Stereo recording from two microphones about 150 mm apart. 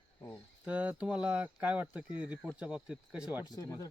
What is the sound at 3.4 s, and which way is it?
Speech, 25° left (ahead or behind).